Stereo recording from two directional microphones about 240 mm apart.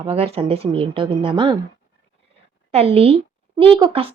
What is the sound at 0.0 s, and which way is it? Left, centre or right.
Speech, right.